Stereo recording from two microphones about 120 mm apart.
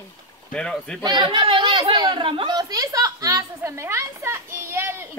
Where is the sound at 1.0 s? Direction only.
35° right (ahead or behind).